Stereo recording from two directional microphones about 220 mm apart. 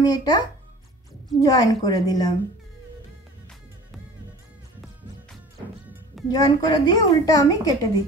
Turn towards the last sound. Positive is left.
turn(degrees=15)  # may be behind; listen again after turning